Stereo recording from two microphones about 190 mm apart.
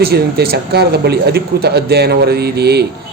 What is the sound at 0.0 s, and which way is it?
Speech, 55° right (ahead or behind).